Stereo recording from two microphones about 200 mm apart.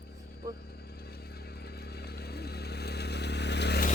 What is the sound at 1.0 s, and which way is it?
Vehicle, 50° left (ahead or behind).